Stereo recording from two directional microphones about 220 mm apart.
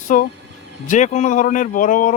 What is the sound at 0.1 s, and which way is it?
Speech, 35° left (ahead or behind).